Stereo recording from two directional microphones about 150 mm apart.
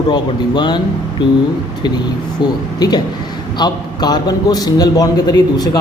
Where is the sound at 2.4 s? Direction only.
30° left (ahead or behind).